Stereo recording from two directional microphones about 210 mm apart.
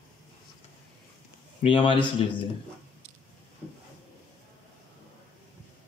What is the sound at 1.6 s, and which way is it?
Speech, 25° left (ahead or behind).